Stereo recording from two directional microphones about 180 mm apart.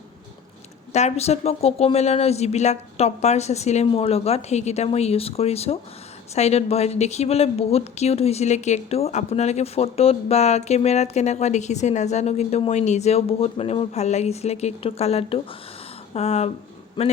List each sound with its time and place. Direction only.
0.9 s speech: 35° left (ahead or behind)